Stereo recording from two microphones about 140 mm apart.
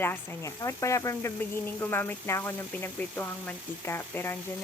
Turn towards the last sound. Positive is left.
turn(degrees=15)  # may be behind; listen again after turning